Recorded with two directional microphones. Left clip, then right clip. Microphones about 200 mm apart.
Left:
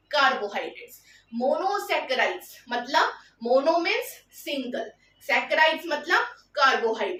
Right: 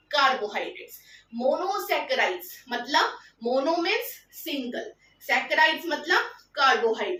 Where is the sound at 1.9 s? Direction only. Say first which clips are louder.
Even; 15° left (ahead or behind).